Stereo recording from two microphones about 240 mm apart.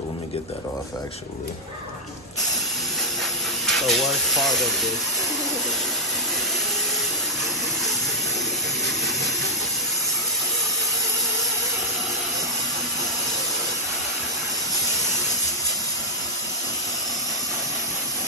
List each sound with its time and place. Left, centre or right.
3.6 s speech: centre